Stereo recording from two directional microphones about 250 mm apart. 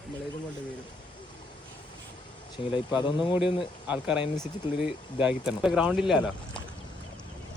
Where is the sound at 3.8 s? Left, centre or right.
Centre.